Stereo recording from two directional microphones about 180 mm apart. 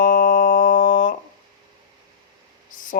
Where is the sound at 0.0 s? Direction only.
50° left (ahead or behind).